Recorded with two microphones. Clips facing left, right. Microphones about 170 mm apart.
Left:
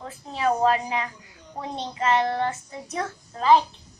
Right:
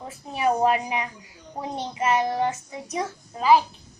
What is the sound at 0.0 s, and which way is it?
A child's voice, 20° right (ahead or behind).